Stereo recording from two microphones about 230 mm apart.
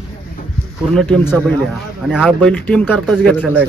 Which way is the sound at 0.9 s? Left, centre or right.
Centre.